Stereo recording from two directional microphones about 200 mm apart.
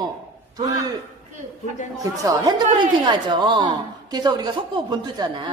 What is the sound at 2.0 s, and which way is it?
A woman's voice, 20° right (ahead or behind).